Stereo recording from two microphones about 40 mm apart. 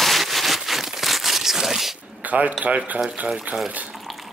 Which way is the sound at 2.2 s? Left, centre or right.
Right.